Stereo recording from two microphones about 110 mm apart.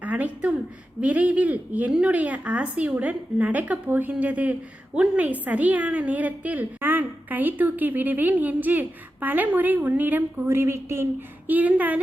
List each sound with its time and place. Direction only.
0.0 s a woman's voice: 15° right (ahead or behind)